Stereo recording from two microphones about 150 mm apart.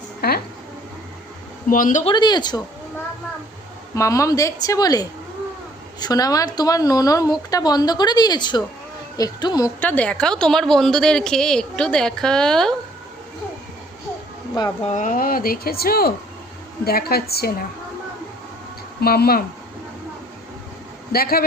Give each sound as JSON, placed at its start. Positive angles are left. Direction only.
{"t": 0.2, "sound": "a sound", "side_deg": 90}
{"t": 1.7, "sound": "a man's voice", "side_deg": 60}
{"t": 2.0, "sound": "a woman's voice", "side_deg": 30}
{"t": 3.9, "sound": "a woman's voice", "side_deg": 20}
{"t": 9.8, "sound": "a woman's voice", "side_deg": 10}
{"t": 14.8, "sound": "a woman's voice", "side_deg": 60}
{"t": 19.0, "sound": "a woman's voice", "side_deg": 90}
{"t": 21.1, "sound": "a woman's voice", "side_deg": 90}